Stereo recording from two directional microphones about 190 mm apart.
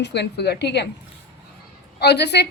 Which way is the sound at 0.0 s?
65° left (ahead or behind).